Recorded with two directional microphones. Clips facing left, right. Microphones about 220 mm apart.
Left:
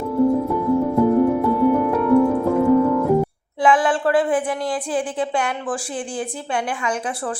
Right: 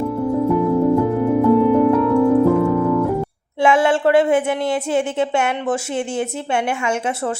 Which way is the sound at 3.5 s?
25° right (ahead or behind).